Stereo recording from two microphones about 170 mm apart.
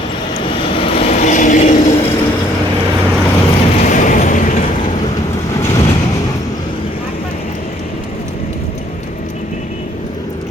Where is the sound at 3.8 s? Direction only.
50° left (ahead or behind).